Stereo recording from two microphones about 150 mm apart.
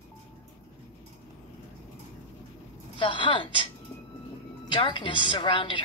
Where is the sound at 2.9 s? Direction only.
35° left (ahead or behind).